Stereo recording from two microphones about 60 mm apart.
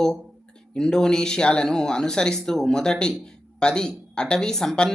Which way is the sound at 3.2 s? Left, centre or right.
Centre.